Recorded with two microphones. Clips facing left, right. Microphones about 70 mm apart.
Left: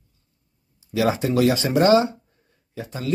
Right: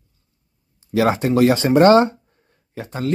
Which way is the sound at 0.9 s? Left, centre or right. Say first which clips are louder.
Right 3 dB; right.